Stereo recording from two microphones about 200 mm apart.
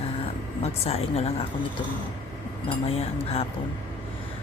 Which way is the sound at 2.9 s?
30° left (ahead or behind).